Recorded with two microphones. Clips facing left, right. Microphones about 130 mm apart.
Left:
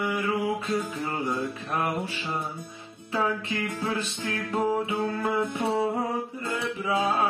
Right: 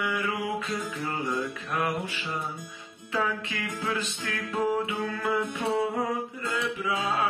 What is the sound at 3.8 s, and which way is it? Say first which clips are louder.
Music: left 2 dB; 25° left (ahead or behind).